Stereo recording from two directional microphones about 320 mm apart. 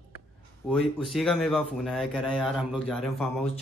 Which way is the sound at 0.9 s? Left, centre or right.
Centre.